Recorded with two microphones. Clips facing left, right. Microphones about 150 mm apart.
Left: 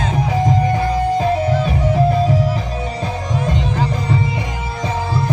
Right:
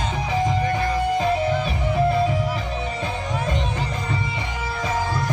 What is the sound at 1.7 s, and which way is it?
Music, 40° left (ahead or behind).